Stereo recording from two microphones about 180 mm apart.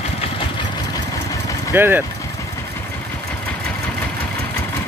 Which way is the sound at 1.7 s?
10° right (ahead or behind).